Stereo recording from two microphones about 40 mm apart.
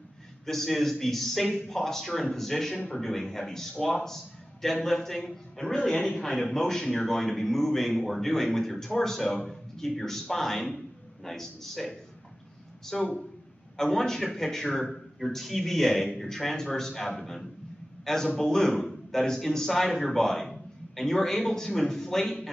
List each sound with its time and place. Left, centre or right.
0.5 s a man's voice: centre